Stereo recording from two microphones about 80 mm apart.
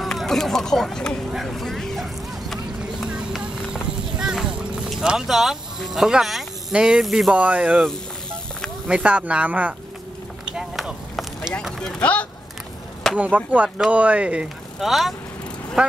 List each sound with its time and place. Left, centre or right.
0.0 s speech: centre
3.3 s clip-clop: centre
7.3 s speech: centre
8.8 s speech: centre
10.5 s a sound: centre
12.0 s speech: centre
13.1 s speech: centre
14.8 s speech: centre